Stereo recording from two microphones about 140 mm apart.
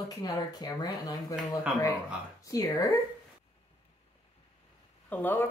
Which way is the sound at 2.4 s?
25° left (ahead or behind).